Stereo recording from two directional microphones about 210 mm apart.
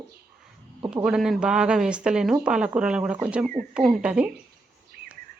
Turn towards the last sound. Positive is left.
turn(degrees=-5)  # may be behind; listen again after turning